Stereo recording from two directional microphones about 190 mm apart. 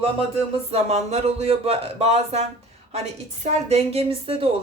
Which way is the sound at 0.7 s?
35° right (ahead or behind).